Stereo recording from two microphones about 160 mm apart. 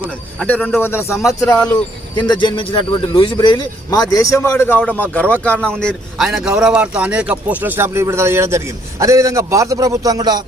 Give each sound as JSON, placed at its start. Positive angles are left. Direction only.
{"t": 0.4, "sound": "a man's voice", "side_deg": 10}